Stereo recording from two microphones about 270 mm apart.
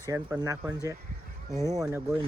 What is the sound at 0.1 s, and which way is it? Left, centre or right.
Speech, centre.